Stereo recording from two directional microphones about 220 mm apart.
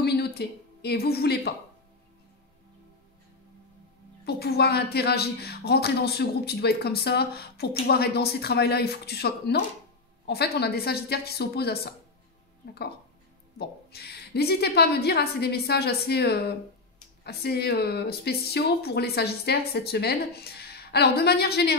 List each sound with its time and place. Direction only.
0.0 s a woman's voice: 45° left (ahead or behind)
4.3 s speech: 45° left (ahead or behind)